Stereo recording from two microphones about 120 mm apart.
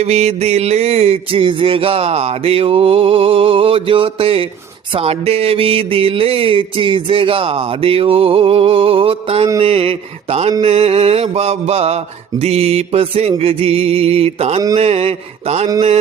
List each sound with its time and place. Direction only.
0.0 s mantra: 60° right (ahead or behind)